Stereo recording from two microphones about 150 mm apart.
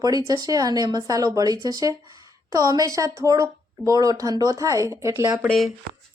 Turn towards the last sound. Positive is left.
turn(degrees=0)  # may be behind; listen again after turning